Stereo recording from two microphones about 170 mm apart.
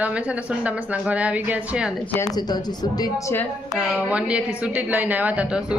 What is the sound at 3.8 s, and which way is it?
A woman's voice, 5° right (ahead or behind).